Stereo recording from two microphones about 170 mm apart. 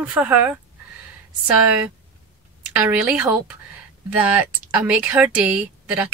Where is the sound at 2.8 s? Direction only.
5° right (ahead or behind).